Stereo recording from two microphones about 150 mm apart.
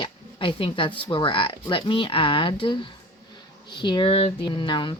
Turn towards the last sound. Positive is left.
turn(degrees=35)  # may be behind; listen again after turning